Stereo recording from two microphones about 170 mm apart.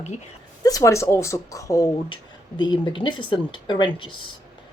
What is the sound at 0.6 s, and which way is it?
Speech, 20° left (ahead or behind).